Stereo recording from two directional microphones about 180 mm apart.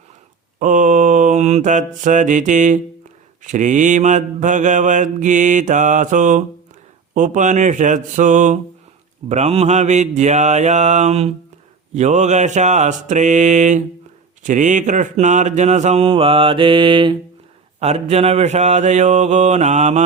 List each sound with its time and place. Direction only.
0.6 s mantra: 45° right (ahead or behind)
9.3 s speech: 35° right (ahead or behind)
17.7 s speech: 35° right (ahead or behind)